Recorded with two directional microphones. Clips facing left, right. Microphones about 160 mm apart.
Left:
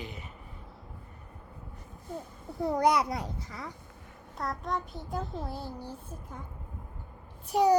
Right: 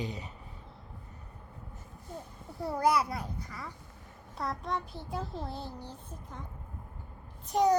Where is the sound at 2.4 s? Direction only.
15° left (ahead or behind).